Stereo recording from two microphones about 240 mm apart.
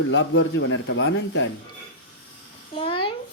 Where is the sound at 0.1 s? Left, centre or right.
Left.